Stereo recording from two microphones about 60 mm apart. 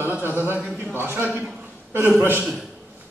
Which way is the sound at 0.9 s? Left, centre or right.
Right.